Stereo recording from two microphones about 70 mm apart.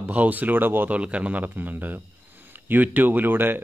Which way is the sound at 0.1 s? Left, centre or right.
Right.